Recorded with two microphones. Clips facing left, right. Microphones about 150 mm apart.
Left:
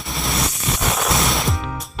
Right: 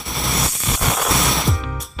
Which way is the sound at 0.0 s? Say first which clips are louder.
Even; centre (ahead or behind).